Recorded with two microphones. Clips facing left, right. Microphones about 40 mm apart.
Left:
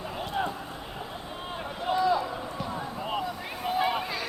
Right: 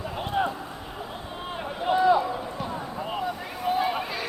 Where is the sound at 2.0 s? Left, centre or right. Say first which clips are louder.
Right 5 dB; right.